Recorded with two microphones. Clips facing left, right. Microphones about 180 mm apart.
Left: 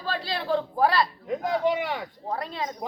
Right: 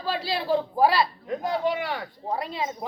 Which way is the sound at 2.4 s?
5° right (ahead or behind).